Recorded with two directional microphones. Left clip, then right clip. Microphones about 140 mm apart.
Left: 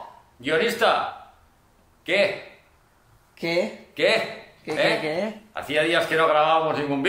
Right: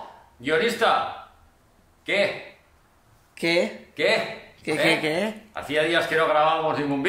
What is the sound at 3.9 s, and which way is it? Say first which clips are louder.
Speech: left 1 dB; 20° left (ahead or behind).